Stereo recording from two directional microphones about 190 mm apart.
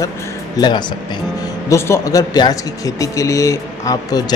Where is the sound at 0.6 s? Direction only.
20° left (ahead or behind).